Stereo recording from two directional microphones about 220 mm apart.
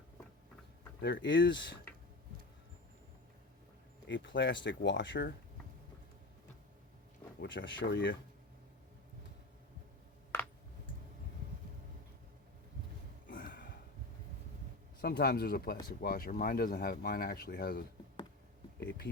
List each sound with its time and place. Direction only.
1.0 s speech: 55° left (ahead or behind)
4.1 s speech: 55° left (ahead or behind)
7.3 s speech: 55° left (ahead or behind)
10.3 s a sound: 10° left (ahead or behind)
13.3 s a sound: 40° left (ahead or behind)
15.0 s speech: 45° left (ahead or behind)